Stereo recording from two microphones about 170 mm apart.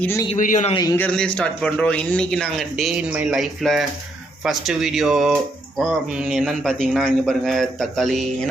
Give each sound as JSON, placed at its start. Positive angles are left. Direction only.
{"t": 0.0, "sound": "a man's voice", "side_deg": 15}
{"t": 0.3, "sound": "a man's voice", "side_deg": 50}
{"t": 0.7, "sound": "speech", "side_deg": 20}
{"t": 0.9, "sound": "speech", "side_deg": 5}